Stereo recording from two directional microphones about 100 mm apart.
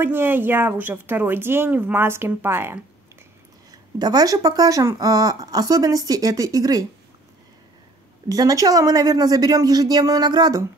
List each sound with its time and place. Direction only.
0.0 s speech: 20° right (ahead or behind)
3.7 s speech: 40° right (ahead or behind)
8.3 s speech: 35° right (ahead or behind)